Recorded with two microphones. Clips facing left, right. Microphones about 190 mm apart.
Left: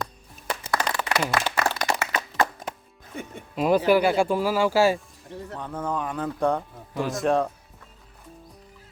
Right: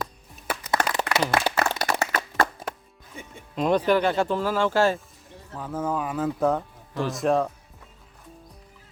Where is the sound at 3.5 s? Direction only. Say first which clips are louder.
Left 2 dB; 5° left (ahead or behind).